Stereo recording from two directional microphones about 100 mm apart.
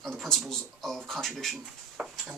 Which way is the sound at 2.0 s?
10° right (ahead or behind).